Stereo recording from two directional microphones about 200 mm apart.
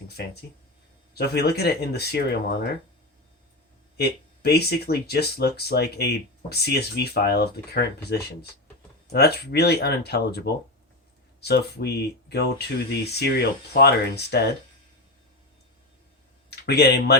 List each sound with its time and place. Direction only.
1.1 s speech: 55° left (ahead or behind)
3.9 s speech: 55° left (ahead or behind)
16.6 s speech: 55° left (ahead or behind)